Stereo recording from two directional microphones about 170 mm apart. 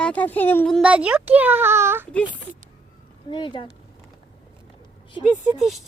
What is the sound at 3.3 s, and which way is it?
Speech, 30° left (ahead or behind).